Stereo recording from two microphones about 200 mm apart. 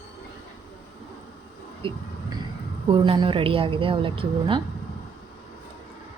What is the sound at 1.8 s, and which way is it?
Speech, 25° right (ahead or behind).